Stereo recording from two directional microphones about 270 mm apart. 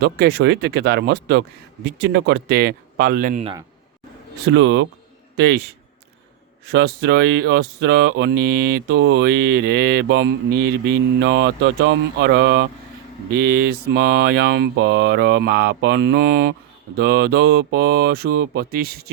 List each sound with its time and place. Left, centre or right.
0.0 s speech: right
4.4 s speech: right
6.7 s speech: right